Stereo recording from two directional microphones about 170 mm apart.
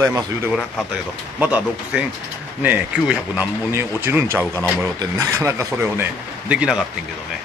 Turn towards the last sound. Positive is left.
turn(degrees=-5)  # may be behind; listen again after turning